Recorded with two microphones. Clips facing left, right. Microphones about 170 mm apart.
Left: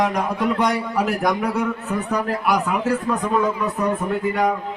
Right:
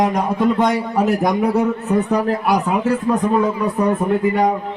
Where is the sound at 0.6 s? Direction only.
25° right (ahead or behind).